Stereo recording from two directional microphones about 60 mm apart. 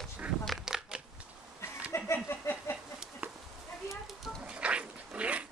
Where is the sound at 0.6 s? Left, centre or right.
Centre.